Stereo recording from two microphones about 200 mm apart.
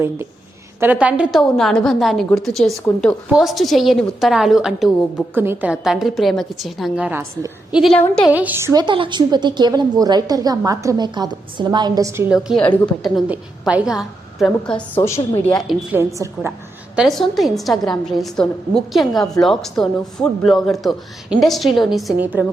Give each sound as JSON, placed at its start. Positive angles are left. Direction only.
{"t": 0.8, "sound": "a woman's voice", "side_deg": -10}
{"t": 7.8, "sound": "a woman's voice", "side_deg": 0}
{"t": 8.3, "sound": "a woman's voice", "side_deg": -10}
{"t": 8.7, "sound": "a woman's voice", "side_deg": -25}
{"t": 15.5, "sound": "a woman's voice", "side_deg": 0}
{"t": 16.0, "sound": "a woman's voice", "side_deg": -15}
{"t": 16.9, "sound": "a woman's voice", "side_deg": 0}